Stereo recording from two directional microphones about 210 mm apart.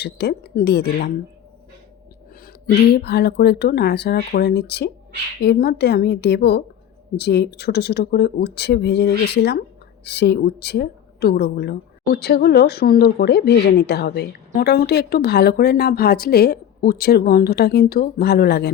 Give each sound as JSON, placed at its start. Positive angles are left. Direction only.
{"t": 0.0, "sound": "speech", "side_deg": 50}
{"t": 2.6, "sound": "speech", "side_deg": 50}